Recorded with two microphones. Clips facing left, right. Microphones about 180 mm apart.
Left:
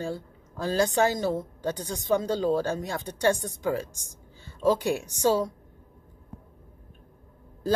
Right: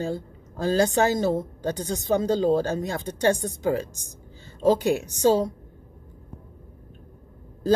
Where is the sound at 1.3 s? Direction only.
40° right (ahead or behind).